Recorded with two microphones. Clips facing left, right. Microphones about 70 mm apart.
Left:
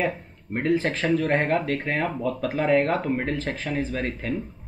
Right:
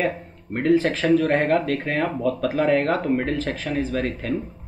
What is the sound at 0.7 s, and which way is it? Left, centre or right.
Speech, left.